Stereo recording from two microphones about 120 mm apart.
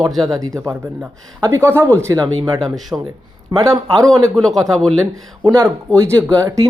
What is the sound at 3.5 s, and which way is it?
Speech, 30° right (ahead or behind).